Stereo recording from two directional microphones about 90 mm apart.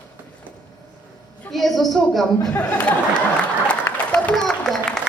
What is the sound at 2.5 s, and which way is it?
Speech, 15° left (ahead or behind).